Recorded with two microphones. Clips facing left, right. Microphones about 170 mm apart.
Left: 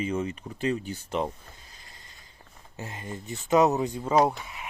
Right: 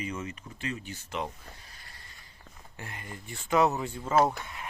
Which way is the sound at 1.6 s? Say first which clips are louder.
Even; 20° left (ahead or behind).